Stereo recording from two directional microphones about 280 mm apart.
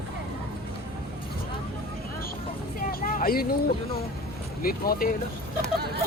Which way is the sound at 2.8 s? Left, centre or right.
Left.